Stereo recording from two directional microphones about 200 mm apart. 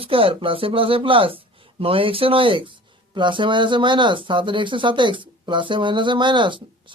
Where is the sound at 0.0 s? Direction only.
25° right (ahead or behind).